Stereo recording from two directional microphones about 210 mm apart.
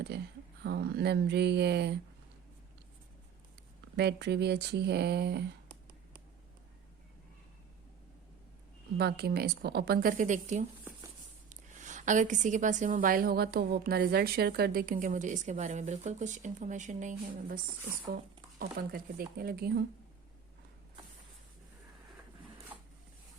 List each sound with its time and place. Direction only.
0.6 s a woman's voice: 50° right (ahead or behind)
3.9 s a woman's voice: 55° right (ahead or behind)
9.0 s a woman's voice: 50° right (ahead or behind)
18.6 s a woman's voice: 45° right (ahead or behind)